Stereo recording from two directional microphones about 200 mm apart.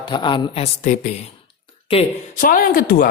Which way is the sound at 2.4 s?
45° left (ahead or behind).